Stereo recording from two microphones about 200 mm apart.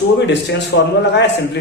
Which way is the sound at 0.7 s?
60° left (ahead or behind).